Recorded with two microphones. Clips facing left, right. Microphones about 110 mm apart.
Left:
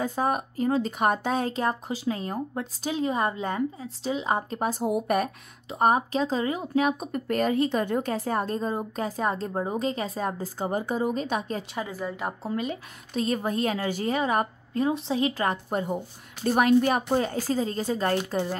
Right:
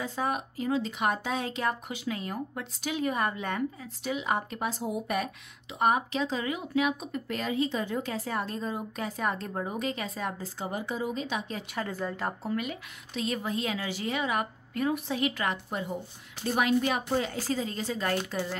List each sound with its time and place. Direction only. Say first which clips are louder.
0.0 s a woman's voice: left 5 dB; 45° left (ahead or behind)
11.7 s a woman's voice: left 1 dB; 10° left (ahead or behind)
12.5 s a woman's voice: left 3 dB; 30° left (ahead or behind)
13.2 s a woman's voice: left 5 dB; 45° left (ahead or behind)